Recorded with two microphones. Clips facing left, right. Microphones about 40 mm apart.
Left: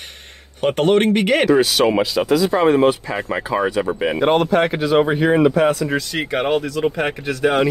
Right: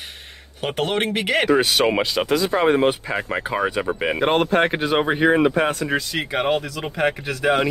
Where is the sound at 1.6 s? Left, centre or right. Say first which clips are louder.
Left 3 dB; right.